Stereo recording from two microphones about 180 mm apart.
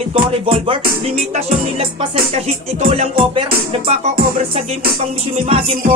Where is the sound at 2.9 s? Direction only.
35° right (ahead or behind).